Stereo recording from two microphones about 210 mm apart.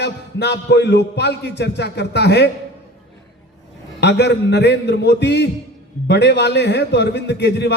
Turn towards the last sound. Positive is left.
turn(degrees=55)  # may be behind; listen again after turning